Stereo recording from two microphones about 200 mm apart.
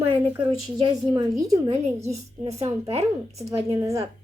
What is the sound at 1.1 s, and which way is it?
A woman's voice, 25° right (ahead or behind).